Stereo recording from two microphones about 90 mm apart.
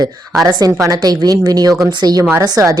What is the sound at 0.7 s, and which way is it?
A woman's voice, 35° right (ahead or behind).